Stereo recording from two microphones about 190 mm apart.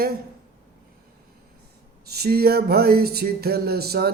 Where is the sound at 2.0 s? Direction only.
55° right (ahead or behind).